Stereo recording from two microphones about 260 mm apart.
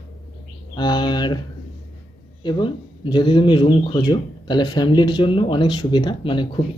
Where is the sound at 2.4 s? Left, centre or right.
Centre.